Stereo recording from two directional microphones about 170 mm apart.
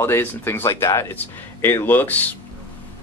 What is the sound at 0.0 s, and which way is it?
Speech, 15° left (ahead or behind).